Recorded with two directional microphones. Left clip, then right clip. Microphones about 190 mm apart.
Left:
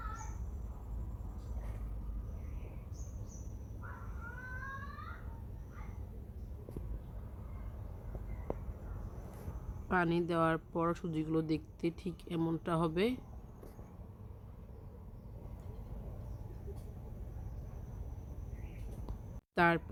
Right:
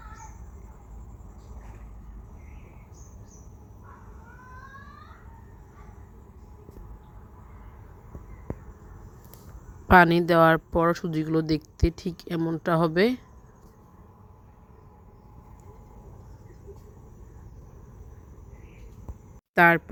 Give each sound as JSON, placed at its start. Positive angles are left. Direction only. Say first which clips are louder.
{"t": 9.9, "sound": "speech", "louder": "right 16 dB", "side_deg": -45}
{"t": 19.5, "sound": "speech", "louder": "right 12 dB", "side_deg": -35}